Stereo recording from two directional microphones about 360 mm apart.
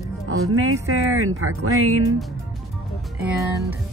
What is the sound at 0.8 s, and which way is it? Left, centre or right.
Speech, right.